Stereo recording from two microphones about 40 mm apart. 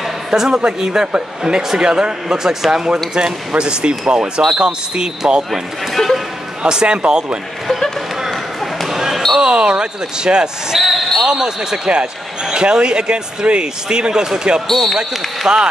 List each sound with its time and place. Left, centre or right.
0.3 s speech: centre
6.0 s speech: centre
6.6 s speech: right
8.8 s basketball bounce: centre
9.4 s speech: right
10.8 s speech: centre
11.2 s speech: centre
14.7 s speech: centre
15.0 s speech: centre